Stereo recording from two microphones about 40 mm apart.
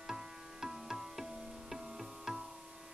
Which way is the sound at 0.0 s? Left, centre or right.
Centre.